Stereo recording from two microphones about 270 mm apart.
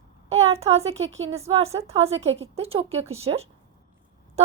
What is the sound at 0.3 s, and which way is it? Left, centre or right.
Speech, right.